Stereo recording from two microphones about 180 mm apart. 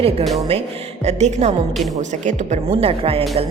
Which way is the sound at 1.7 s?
Centre (ahead or behind).